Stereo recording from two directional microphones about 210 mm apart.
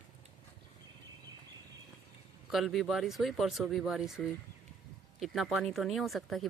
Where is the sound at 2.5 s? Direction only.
Centre (ahead or behind).